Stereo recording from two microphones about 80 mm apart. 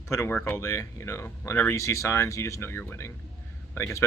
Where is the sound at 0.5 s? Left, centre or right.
Left.